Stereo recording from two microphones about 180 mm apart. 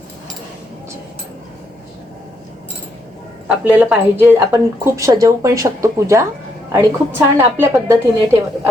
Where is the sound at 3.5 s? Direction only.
10° right (ahead or behind).